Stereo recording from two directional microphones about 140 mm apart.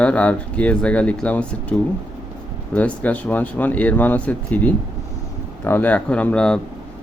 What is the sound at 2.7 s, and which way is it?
Speech, 10° left (ahead or behind).